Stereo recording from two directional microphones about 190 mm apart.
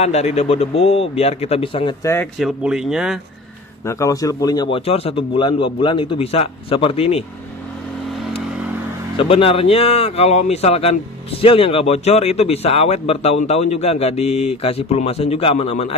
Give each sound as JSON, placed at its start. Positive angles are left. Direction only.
{"t": 0.0, "sound": "speech", "side_deg": 35}
{"t": 2.3, "sound": "speech", "side_deg": 0}
{"t": 3.8, "sound": "speech", "side_deg": 15}
{"t": 9.1, "sound": "speech", "side_deg": 30}